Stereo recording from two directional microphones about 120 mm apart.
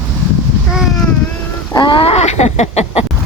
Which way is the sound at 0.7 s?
Centre (ahead or behind).